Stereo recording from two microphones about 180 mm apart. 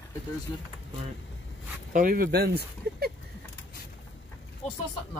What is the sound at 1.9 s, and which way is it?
Speech, 50° right (ahead or behind).